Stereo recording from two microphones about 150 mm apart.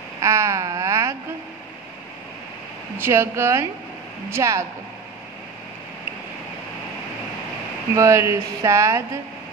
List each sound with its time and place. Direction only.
0.2 s a sound: 20° right (ahead or behind)
3.0 s speech: 15° right (ahead or behind)
7.9 s speech: 20° right (ahead or behind)